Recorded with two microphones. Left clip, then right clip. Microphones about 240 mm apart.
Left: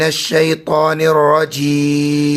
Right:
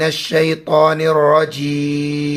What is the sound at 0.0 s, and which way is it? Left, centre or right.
Mantra, centre.